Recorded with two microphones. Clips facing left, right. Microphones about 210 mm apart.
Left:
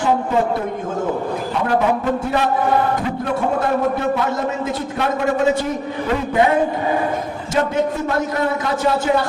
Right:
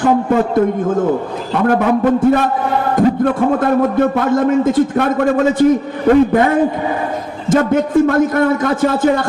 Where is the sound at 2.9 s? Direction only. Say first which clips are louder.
Right 8 dB; 50° right (ahead or behind).